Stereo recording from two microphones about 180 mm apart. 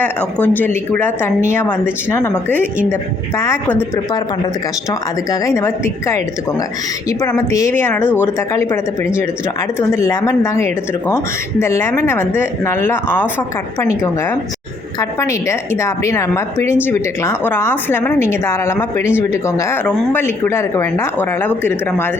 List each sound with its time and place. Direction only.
0.0 s a woman's voice: 10° left (ahead or behind)
4.9 s a woman's voice: 20° left (ahead or behind)
14.9 s a woman's voice: 15° left (ahead or behind)